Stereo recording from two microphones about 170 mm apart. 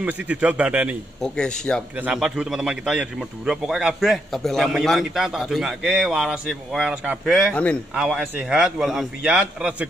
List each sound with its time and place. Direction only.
0.0 s a man's voice: 10° right (ahead or behind)
1.2 s a man's voice: 5° left (ahead or behind)
2.0 s a man's voice: 5° right (ahead or behind)